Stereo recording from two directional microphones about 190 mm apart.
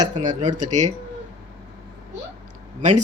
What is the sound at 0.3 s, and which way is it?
Speech, 40° right (ahead or behind).